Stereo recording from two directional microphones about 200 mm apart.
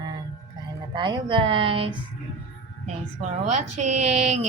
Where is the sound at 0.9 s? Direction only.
25° right (ahead or behind).